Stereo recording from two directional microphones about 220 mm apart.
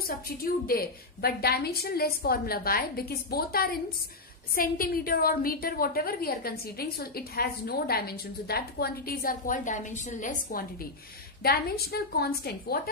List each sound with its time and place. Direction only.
0.0 s a woman's voice: 40° left (ahead or behind)